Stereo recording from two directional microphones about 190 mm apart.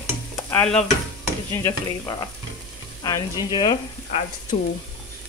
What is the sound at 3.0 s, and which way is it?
Frying, 20° left (ahead or behind).